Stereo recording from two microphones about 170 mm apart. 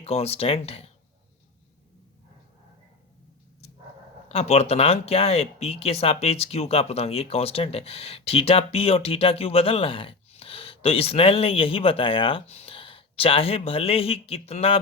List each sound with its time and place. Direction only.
0.0 s speech: 35° left (ahead or behind)
4.3 s speech: 35° left (ahead or behind)